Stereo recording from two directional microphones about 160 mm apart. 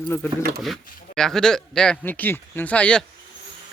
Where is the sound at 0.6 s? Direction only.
Centre (ahead or behind).